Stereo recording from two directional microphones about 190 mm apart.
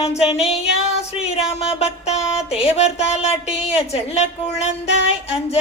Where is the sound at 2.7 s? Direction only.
35° left (ahead or behind).